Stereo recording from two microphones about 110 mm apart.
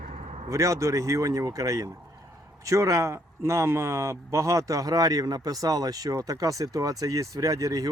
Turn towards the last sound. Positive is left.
turn(degrees=-30)  # may be behind; listen again after turning